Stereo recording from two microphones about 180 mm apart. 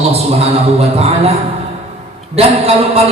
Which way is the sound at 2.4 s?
35° right (ahead or behind).